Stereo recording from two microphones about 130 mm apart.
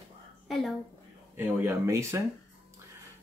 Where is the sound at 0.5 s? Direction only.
Centre (ahead or behind).